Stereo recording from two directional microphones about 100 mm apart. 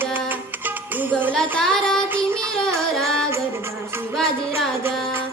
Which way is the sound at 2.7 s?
5° left (ahead or behind).